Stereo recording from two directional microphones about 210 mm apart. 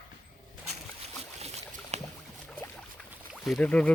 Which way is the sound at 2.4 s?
5° left (ahead or behind).